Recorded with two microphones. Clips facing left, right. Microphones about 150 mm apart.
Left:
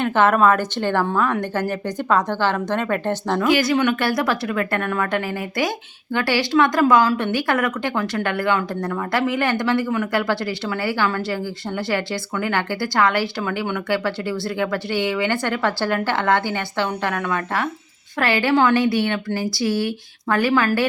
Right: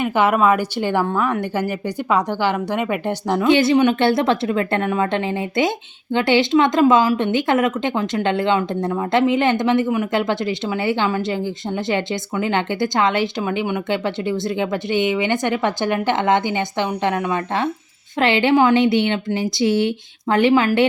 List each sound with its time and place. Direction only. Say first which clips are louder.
0.0 s a woman's voice: even; 10° right (ahead or behind)
3.4 s speech: right 4 dB; 25° right (ahead or behind)